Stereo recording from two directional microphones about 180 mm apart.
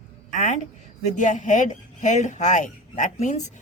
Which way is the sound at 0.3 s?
45° left (ahead or behind).